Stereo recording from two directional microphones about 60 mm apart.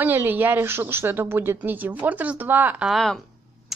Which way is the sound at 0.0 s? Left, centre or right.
Right.